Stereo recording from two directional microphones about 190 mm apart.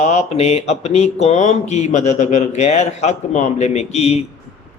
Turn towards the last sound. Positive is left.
turn(degrees=35)  # may be behind; listen again after turning